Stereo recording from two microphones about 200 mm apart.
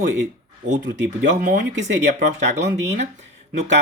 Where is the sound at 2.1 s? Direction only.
35° right (ahead or behind).